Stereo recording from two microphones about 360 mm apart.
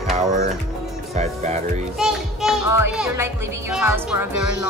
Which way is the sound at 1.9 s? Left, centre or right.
Centre.